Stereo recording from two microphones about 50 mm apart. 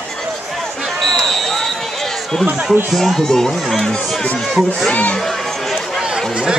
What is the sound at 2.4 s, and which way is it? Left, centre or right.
Speech, right.